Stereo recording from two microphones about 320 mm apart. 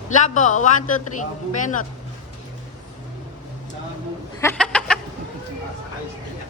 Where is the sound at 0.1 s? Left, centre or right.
Left.